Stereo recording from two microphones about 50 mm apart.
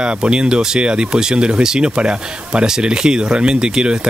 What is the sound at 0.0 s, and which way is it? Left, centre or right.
Speech, centre.